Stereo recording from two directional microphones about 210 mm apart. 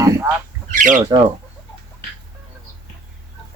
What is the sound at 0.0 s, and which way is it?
Bird, 15° right (ahead or behind).